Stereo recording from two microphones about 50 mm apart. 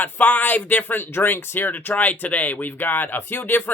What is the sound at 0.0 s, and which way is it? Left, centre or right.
Speech, left.